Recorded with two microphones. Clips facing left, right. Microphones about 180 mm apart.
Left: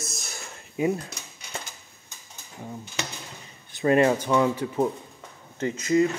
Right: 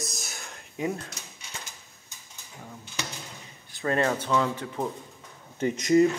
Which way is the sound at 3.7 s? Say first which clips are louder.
Left 6 dB; 15° left (ahead or behind).